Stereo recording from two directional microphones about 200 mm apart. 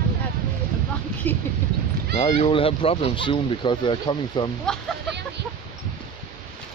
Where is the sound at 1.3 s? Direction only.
10° left (ahead or behind).